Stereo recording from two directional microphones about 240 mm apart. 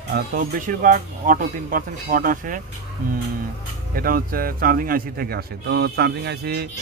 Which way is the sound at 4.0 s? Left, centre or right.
Right.